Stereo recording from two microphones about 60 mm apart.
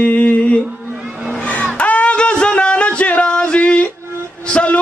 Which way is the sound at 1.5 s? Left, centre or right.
Left.